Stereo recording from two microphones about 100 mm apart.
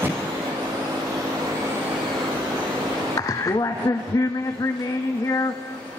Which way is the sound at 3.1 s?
35° left (ahead or behind).